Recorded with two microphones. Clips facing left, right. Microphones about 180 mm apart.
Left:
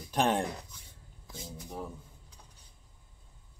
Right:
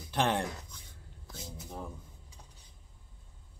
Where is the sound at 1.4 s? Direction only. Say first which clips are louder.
Left 2 dB; centre (ahead or behind).